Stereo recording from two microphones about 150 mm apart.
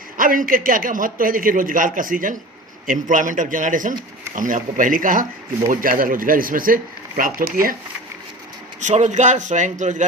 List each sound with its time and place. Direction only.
0.2 s a man's voice: 65° right (ahead or behind)
8.8 s a man's voice: 55° right (ahead or behind)